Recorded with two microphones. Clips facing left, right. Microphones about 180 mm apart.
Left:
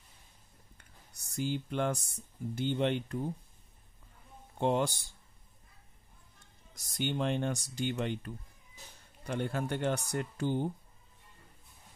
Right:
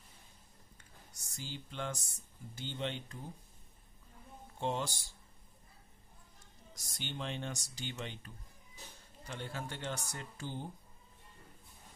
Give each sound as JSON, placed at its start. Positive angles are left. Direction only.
{"t": 0.7, "sound": "a sound", "side_deg": 55}
{"t": 2.5, "sound": "speech", "side_deg": 55}
{"t": 4.6, "sound": "speech", "side_deg": 60}
{"t": 6.7, "sound": "speech", "side_deg": 55}